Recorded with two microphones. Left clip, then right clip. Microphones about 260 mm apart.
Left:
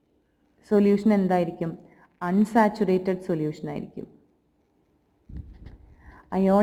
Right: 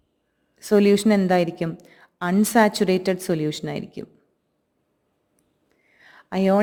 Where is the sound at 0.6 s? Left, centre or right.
Right.